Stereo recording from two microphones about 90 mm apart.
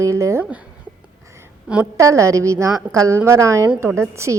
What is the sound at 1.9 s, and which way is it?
A woman's voice, 35° right (ahead or behind).